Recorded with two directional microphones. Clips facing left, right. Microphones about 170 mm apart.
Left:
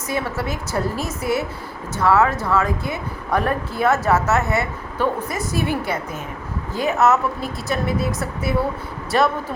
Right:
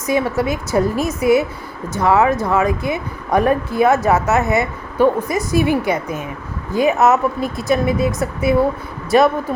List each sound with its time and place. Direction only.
0.1 s a woman's voice: 15° right (ahead or behind)